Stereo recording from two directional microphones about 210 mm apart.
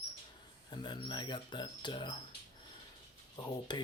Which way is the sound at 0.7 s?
20° left (ahead or behind).